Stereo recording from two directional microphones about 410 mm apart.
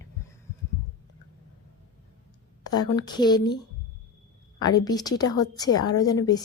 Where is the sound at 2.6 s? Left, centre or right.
Centre.